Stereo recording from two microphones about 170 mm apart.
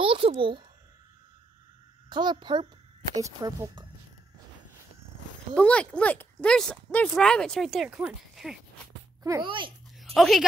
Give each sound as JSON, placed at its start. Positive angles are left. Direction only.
{"t": 0.0, "sound": "a child's voice", "side_deg": -30}
{"t": 2.0, "sound": "speech", "side_deg": -25}
{"t": 5.5, "sound": "speech", "side_deg": 10}
{"t": 9.2, "sound": "speech", "side_deg": -25}
{"t": 9.9, "sound": "a sound", "side_deg": 0}